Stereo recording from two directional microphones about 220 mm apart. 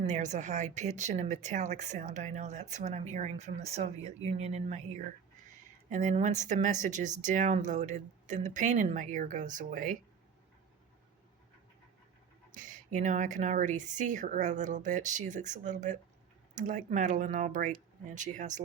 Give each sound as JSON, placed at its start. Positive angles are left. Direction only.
{"t": 0.0, "sound": "speech", "side_deg": -30}
{"t": 12.5, "sound": "speech", "side_deg": -35}